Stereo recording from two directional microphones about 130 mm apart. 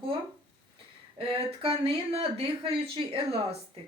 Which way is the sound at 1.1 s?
45° right (ahead or behind).